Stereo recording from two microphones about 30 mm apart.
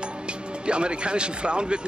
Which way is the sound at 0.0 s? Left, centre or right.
Right.